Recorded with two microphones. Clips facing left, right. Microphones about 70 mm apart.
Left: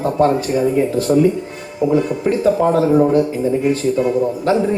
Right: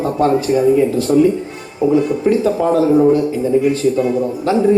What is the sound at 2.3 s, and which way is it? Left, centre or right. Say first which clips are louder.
A man's voice: left 1 dB; left.